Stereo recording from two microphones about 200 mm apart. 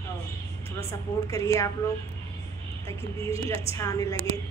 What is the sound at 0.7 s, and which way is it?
Speech, 15° left (ahead or behind).